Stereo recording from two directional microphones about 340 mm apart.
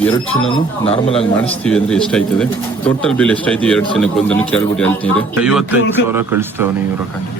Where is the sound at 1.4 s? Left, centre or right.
Centre.